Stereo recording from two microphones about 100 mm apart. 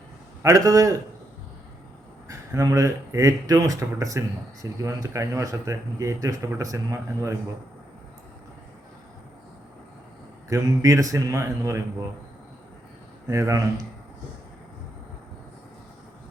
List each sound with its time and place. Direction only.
0.4 s speech: 35° right (ahead or behind)
2.2 s speech: 35° right (ahead or behind)
10.5 s speech: 30° right (ahead or behind)
13.2 s speech: 35° right (ahead or behind)